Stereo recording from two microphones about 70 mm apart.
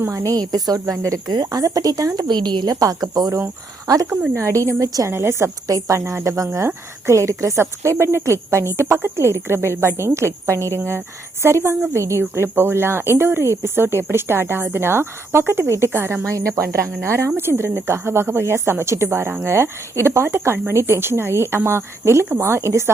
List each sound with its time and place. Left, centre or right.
0.0 s a woman's voice: right
1.3 s speech: right
3.8 s a woman's voice: right
4.4 s speech: right
5.6 s speech: right